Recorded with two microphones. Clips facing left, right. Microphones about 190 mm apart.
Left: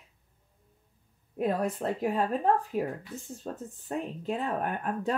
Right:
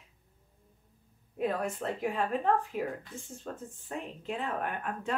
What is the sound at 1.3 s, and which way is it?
Speech, 40° left (ahead or behind).